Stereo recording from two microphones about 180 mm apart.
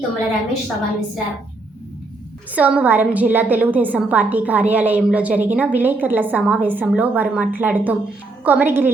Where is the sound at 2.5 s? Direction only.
10° right (ahead or behind).